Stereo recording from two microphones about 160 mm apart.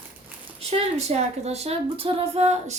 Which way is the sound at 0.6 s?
40° right (ahead or behind).